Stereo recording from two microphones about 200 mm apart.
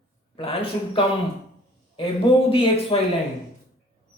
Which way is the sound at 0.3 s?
25° left (ahead or behind).